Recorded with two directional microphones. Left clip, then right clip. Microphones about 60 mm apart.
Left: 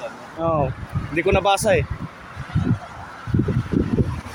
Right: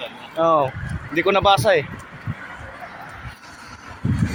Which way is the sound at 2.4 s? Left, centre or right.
Centre.